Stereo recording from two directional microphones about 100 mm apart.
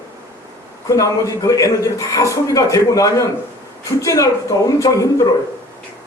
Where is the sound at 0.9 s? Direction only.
35° left (ahead or behind).